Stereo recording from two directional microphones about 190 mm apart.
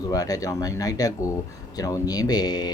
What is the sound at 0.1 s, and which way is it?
Speech, 20° left (ahead or behind).